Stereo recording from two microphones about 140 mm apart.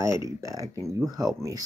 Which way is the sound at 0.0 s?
20° right (ahead or behind).